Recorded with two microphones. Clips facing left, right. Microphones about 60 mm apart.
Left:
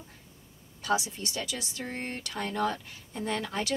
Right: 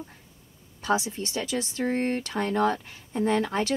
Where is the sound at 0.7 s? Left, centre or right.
Right.